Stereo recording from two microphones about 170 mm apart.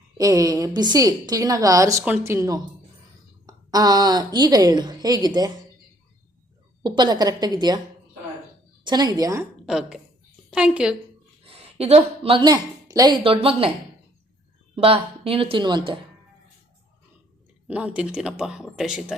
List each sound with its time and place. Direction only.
0.2 s a woman's voice: 20° right (ahead or behind)
6.8 s a woman's voice: 25° right (ahead or behind)
8.8 s a woman's voice: 25° right (ahead or behind)
9.6 s speech: 5° right (ahead or behind)
11.4 s a woman's voice: 35° right (ahead or behind)
14.8 s speech: 35° right (ahead or behind)
17.7 s speech: 5° right (ahead or behind)